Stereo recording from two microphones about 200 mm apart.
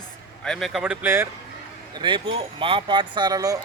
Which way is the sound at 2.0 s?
25° right (ahead or behind).